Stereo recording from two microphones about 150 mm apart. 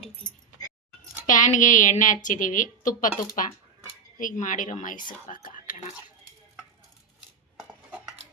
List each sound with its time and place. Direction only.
1.3 s a woman's voice: 60° left (ahead or behind)
5.2 s whispering: 65° left (ahead or behind)
7.9 s cutlery: 10° right (ahead or behind)